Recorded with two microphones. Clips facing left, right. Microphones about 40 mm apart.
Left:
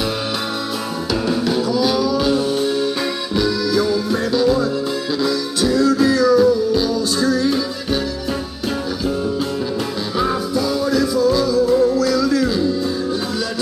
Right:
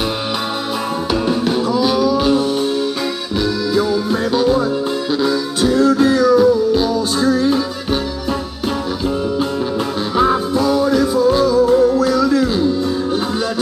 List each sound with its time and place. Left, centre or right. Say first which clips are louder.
1.4 s music: right 2 dB; right
2.4 s music: right 1 dB; centre
4.3 s music: right 1 dB; right
10.5 s music: right 4 dB; right